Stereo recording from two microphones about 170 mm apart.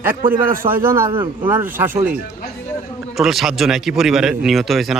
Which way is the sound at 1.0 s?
30° right (ahead or behind).